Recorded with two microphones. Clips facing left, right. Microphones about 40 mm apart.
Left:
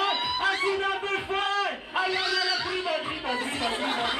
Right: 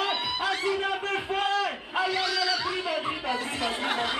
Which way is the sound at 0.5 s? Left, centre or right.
Left.